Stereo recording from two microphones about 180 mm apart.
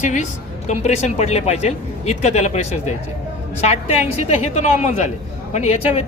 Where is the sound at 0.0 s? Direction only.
40° left (ahead or behind).